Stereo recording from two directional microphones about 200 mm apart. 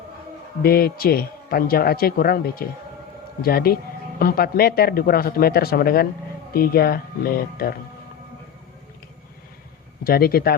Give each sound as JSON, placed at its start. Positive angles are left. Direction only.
{"t": 0.6, "sound": "speech", "side_deg": 50}
{"t": 10.0, "sound": "speech", "side_deg": 50}